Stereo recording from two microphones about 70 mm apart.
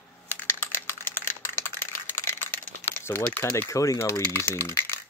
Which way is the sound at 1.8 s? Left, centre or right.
Left.